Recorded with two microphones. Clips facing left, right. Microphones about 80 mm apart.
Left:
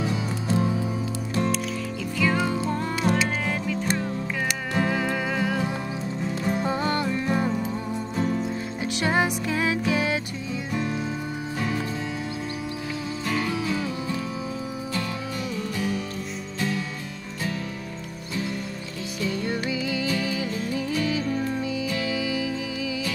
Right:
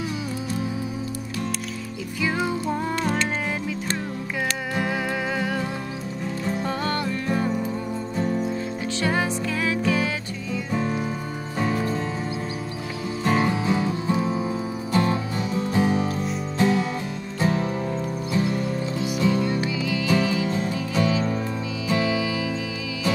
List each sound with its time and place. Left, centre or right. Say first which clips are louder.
2.1 s music: left 1 dB; centre
3.0 s music: left 5 dB; centre
4.7 s music: left 2 dB; centre
6.4 s music: left 1 dB; centre
9.0 s music: left 1 dB; left
10.7 s music: right 3 dB; right
13.2 s music: right 6 dB; right
19.1 s music: right 6 dB; right
19.8 s music: right 2 dB; left
20.1 s music: right 5 dB; right